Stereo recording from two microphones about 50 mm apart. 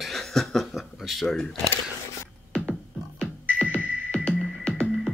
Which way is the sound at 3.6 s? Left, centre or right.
Left.